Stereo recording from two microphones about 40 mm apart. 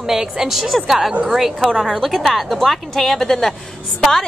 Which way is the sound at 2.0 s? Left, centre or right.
Centre.